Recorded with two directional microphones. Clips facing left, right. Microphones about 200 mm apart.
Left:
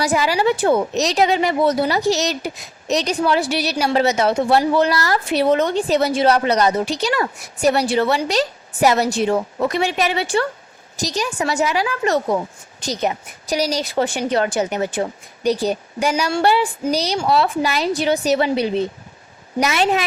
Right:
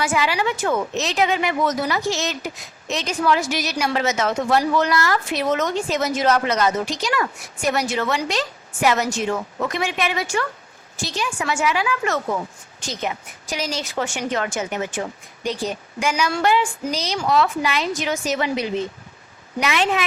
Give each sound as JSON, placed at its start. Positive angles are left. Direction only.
{"t": 0.0, "sound": "a woman's voice", "side_deg": 40}